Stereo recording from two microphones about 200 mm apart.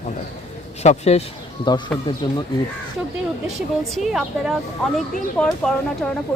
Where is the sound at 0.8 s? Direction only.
35° left (ahead or behind).